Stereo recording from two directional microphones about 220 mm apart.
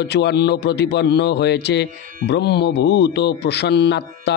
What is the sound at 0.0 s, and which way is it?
Speech, 50° left (ahead or behind).